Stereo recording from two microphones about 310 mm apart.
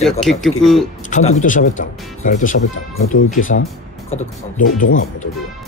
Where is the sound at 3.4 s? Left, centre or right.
Left.